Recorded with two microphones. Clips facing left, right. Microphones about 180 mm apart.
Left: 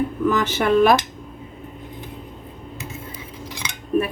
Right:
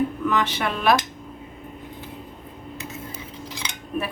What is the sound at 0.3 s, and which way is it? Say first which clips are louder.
Speech: left 5 dB; 45° left (ahead or behind).